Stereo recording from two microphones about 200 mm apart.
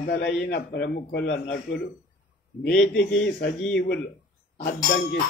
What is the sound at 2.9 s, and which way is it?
A man's voice, 50° left (ahead or behind).